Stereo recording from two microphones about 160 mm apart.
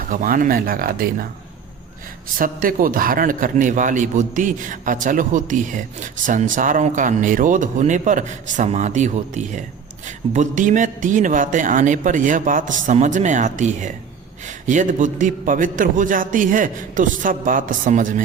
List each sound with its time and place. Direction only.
0.1 s a man's voice: 55° right (ahead or behind)
2.4 s a man's voice: 60° right (ahead or behind)